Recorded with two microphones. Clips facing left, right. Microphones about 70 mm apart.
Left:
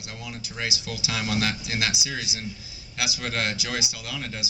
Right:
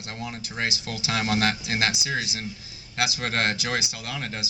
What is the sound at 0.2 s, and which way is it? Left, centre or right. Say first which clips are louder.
A man's voice: right 3 dB; right.